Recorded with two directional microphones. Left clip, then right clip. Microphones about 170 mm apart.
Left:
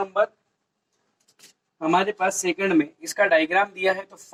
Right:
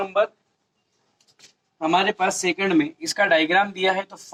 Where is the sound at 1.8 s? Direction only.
30° right (ahead or behind).